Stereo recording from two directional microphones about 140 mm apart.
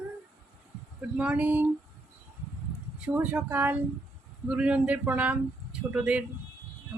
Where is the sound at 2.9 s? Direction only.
10° right (ahead or behind).